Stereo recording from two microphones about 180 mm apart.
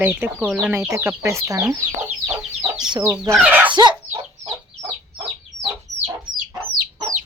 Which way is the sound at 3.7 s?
25° right (ahead or behind).